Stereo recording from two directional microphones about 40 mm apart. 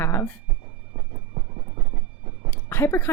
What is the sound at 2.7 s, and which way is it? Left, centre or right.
Speech, left.